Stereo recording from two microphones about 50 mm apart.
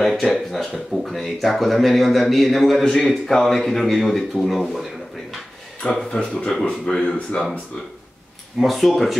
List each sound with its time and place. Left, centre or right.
0.0 s speech: centre
5.8 s speech: centre
8.5 s speech: centre